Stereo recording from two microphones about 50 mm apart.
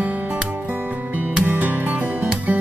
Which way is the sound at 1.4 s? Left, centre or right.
Right.